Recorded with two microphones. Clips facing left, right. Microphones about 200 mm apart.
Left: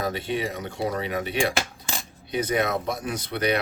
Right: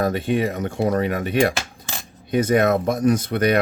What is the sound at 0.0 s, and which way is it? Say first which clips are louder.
Speech: right 7 dB; 50° right (ahead or behind).